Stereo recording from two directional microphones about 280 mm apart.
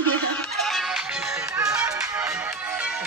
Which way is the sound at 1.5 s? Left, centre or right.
Centre.